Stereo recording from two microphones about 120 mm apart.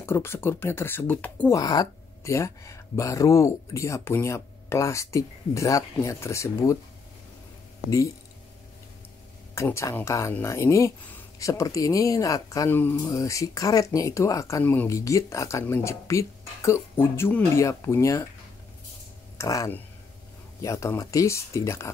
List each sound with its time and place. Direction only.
0.0 s speech: 20° left (ahead or behind)
1.5 s speech: 35° left (ahead or behind)
9.6 s speech: 25° left (ahead or behind)
14.6 s speech: 15° left (ahead or behind)
14.9 s speech: 25° left (ahead or behind)
19.3 s speech: 30° left (ahead or behind)